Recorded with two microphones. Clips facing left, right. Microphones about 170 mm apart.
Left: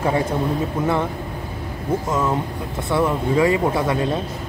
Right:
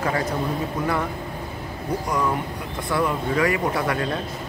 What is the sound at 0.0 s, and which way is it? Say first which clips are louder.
Speech: left 4 dB; 25° left (ahead or behind).